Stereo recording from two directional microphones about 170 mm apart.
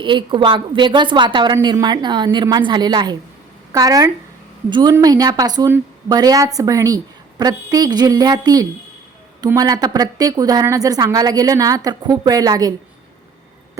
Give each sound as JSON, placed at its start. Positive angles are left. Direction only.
{"t": 0.0, "sound": "a woman's voice", "side_deg": -30}